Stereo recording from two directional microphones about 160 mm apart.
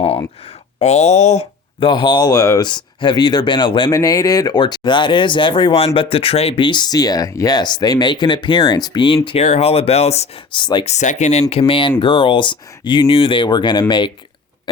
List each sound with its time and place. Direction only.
0.4 s speech: 40° left (ahead or behind)
1.9 s speech: 30° left (ahead or behind)
10.8 s speech: 50° left (ahead or behind); by 14.1 s 30° left (ahead or behind)